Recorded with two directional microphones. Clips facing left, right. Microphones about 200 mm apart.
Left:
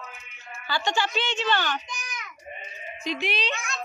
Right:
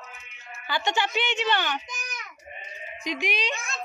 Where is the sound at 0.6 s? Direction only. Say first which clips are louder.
Even; 20° right (ahead or behind).